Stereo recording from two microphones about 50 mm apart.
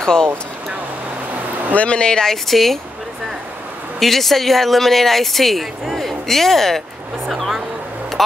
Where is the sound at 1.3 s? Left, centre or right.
Right.